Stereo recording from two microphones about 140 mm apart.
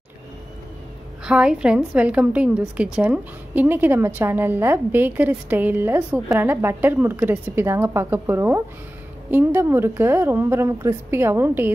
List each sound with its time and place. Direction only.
1.2 s a woman's voice: 5° right (ahead or behind)